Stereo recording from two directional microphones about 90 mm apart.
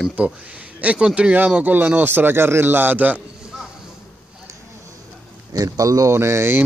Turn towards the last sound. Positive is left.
turn(degrees=-30)  # may be behind; listen again after turning